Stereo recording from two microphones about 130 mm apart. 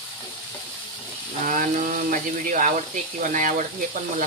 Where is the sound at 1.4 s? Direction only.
85° right.